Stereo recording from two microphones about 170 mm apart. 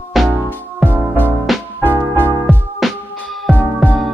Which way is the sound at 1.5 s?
Centre (ahead or behind).